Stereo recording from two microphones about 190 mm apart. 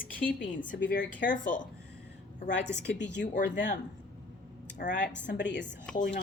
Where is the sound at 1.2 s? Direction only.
45° left (ahead or behind).